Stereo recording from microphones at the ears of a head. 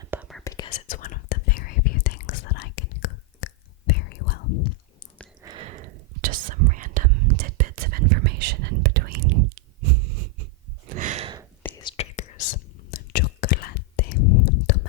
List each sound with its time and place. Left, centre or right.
0.5 s whispering: left
5.4 s whispering: right
11.8 s whispering: left